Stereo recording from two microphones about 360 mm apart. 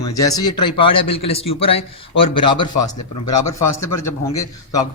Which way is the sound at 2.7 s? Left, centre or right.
Left.